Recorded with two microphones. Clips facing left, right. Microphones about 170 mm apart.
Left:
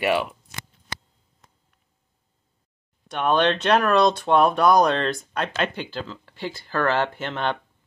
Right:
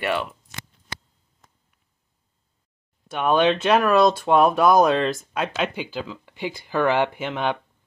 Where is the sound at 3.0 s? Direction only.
5° right (ahead or behind).